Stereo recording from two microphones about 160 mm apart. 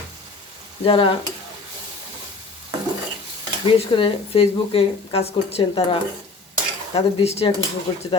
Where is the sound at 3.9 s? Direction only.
35° left (ahead or behind).